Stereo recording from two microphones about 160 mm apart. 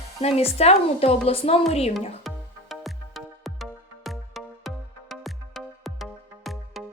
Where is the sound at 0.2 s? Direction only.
40° left (ahead or behind).